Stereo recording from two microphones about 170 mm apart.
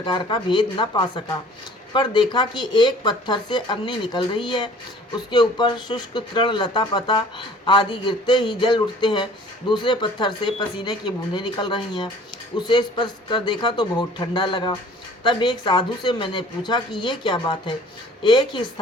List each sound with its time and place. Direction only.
0.0 s speech: 25° left (ahead or behind)